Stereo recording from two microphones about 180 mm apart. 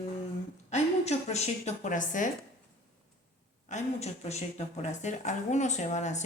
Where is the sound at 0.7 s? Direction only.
35° left (ahead or behind).